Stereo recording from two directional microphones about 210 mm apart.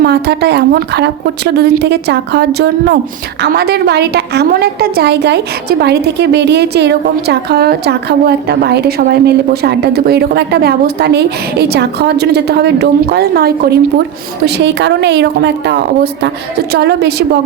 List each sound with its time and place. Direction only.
0.0 s a woman's voice: 50° right (ahead or behind)